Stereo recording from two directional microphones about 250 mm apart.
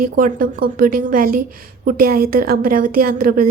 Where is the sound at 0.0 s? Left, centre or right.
Right.